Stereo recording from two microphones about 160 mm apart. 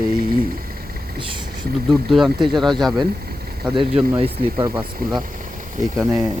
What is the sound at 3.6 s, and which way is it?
Speech, 30° right (ahead or behind).